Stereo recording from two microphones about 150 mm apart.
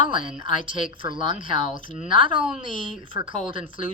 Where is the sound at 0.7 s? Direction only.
35° right (ahead or behind).